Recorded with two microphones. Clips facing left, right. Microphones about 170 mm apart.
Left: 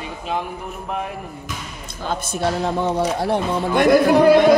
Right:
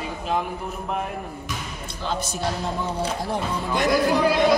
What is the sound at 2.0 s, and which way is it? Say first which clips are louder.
Speech: left 4 dB; 50° left (ahead or behind).